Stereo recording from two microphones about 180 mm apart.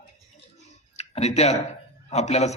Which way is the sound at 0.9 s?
35° left (ahead or behind).